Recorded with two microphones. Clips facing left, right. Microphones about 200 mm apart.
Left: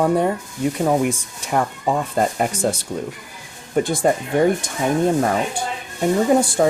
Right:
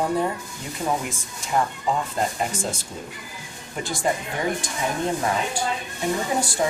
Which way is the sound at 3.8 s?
50° left (ahead or behind).